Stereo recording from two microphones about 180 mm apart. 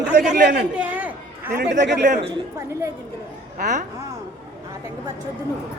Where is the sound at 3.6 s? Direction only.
45° right (ahead or behind).